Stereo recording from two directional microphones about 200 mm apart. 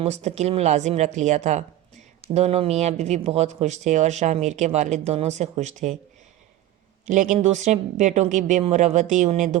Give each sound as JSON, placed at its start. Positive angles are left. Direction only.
{"t": 0.0, "sound": "speech", "side_deg": -35}
{"t": 7.0, "sound": "speech", "side_deg": -40}